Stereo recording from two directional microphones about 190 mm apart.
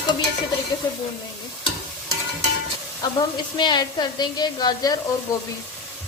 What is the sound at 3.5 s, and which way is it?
Speech, 20° left (ahead or behind).